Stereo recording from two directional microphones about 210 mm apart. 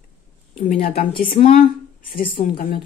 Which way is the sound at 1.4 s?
40° left (ahead or behind).